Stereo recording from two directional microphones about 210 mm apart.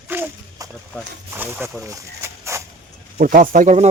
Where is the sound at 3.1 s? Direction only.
45° right (ahead or behind).